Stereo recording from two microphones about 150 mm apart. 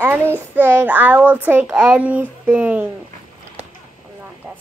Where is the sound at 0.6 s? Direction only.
15° right (ahead or behind).